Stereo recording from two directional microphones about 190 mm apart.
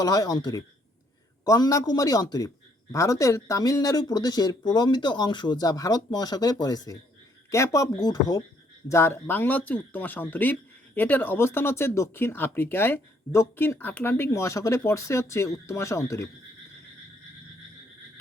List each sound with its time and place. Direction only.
0.0 s speech: 20° left (ahead or behind)